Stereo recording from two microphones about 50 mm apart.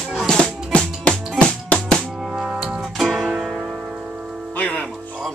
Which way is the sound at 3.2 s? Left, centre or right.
Centre.